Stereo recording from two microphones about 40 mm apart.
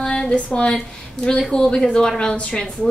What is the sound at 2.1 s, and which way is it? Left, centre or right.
Speech, left.